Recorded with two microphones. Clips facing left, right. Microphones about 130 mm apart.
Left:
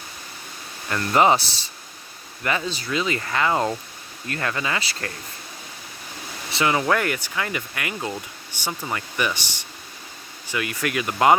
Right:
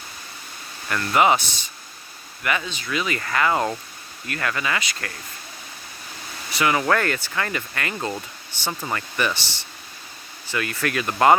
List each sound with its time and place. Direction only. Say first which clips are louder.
0.9 s speech: left 1 dB; 30° left (ahead or behind)
6.5 s speech: even; 25° left (ahead or behind)
6.8 s speech: right 1 dB; 15° left (ahead or behind)